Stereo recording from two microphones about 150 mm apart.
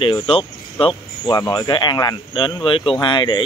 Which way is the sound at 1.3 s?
25° left (ahead or behind).